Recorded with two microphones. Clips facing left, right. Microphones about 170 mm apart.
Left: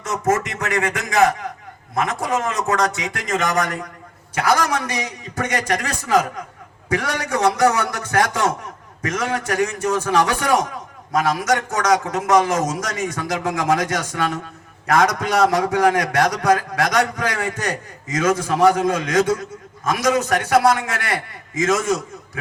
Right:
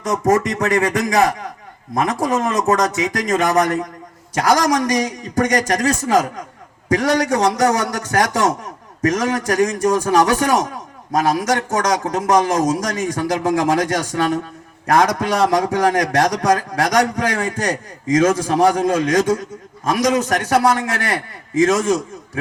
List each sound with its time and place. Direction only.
0.0 s a man's voice: 35° right (ahead or behind)
6.9 s a man's voice: 35° right (ahead or behind)